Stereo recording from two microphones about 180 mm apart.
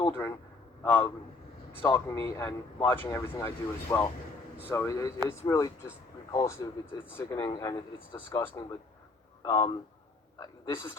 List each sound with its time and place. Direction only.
0.0 s a man's voice: 15° left (ahead or behind)